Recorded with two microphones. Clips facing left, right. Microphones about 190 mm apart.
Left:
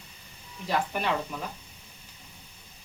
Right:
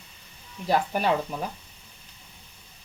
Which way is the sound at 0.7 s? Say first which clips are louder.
Right 4 dB; 40° right (ahead or behind).